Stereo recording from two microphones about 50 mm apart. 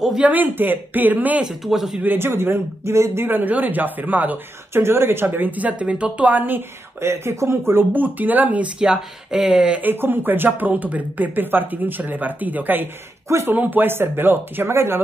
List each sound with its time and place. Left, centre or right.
0.2 s speech: right
1.4 s speech: centre
2.0 s speech: right
2.8 s speech: right
3.3 s speech: right
4.7 s speech: right
5.6 s a woman's voice: right
7.0 s speech: right
7.9 s speech: right
8.7 s speech: centre
9.8 s speech: right